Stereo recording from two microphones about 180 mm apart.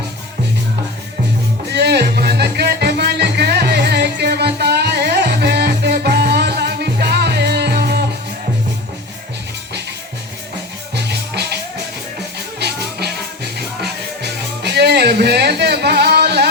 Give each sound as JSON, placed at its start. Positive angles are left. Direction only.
{"t": 1.7, "sound": "music", "side_deg": -65}
{"t": 10.9, "sound": "music", "side_deg": -65}
{"t": 12.5, "sound": "music", "side_deg": -65}